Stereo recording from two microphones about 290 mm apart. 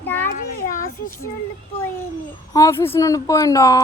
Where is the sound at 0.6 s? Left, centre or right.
Left.